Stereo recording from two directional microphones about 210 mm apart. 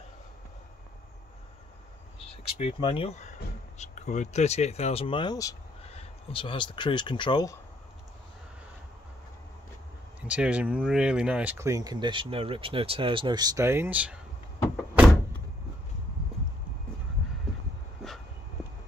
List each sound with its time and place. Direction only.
2.6 s speech: 25° left (ahead or behind)
10.2 s speech: 5° right (ahead or behind)